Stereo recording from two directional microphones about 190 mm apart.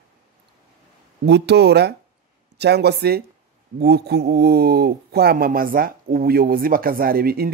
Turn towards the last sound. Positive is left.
turn(degrees=-55)  # may be behind; listen again after turning